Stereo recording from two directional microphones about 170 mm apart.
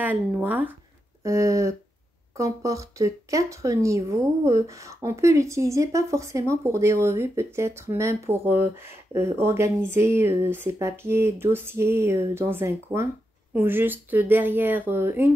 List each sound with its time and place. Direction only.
0.0 s speech: 10° right (ahead or behind)